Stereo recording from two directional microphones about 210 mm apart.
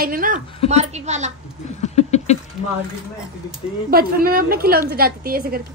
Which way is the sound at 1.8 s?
30° left (ahead or behind).